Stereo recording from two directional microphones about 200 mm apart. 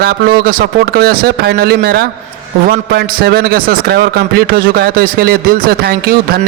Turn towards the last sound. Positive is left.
turn(degrees=-50)  # may be behind; listen again after turning